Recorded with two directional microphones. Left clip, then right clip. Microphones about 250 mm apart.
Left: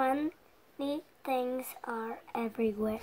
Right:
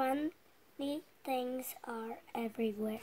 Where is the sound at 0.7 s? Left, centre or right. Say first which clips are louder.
Left 4 dB; centre.